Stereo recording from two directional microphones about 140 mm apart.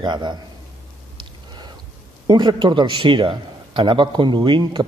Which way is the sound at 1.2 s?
30° right (ahead or behind).